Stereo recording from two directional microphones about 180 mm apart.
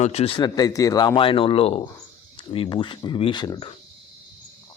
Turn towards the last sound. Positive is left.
turn(degrees=25)  # may be behind; listen again after turning